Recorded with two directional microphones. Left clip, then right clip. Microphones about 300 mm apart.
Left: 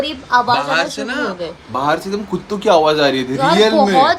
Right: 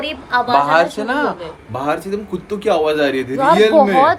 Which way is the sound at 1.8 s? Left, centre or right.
Centre.